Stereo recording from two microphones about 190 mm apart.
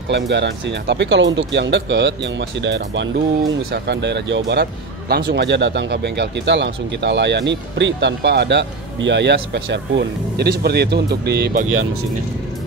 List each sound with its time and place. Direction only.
0.1 s speech: 65° right (ahead or behind)